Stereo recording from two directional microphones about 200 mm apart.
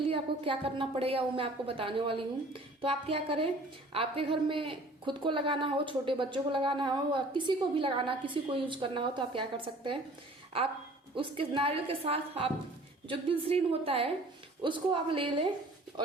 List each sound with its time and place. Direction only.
0.0 s speech: 25° right (ahead or behind)
11.1 s speech: 25° right (ahead or behind)